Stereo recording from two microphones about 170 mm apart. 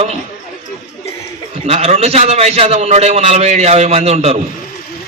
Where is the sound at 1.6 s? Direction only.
40° right (ahead or behind).